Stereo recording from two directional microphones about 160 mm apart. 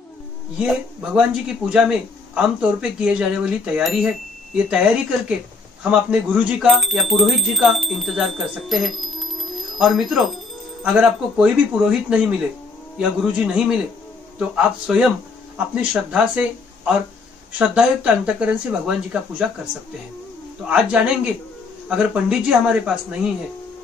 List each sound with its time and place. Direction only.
0.6 s speech: 5° right (ahead or behind)
14.5 s speech: 5° right (ahead or behind)